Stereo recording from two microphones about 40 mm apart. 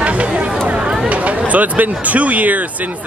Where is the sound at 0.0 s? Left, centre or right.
Right.